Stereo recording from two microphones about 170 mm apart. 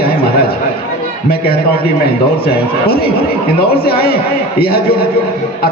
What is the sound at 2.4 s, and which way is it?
A man's voice, 60° left (ahead or behind).